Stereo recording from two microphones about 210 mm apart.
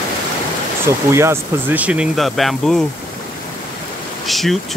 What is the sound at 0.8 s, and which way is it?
Speech, 10° right (ahead or behind).